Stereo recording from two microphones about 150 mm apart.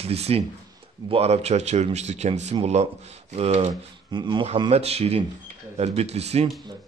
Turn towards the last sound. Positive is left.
turn(degrees=-45)  # may be behind; listen again after turning